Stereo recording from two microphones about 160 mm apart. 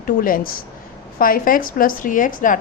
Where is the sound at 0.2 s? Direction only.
60° left (ahead or behind).